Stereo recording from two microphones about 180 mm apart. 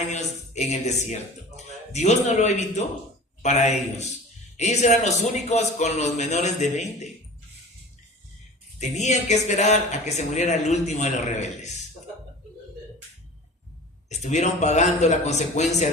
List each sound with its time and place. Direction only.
0.1 s music: 40° left (ahead or behind)
3.4 s a man's voice: 40° left (ahead or behind)
8.8 s a man's voice: 40° left (ahead or behind)
14.1 s a man's voice: 40° left (ahead or behind)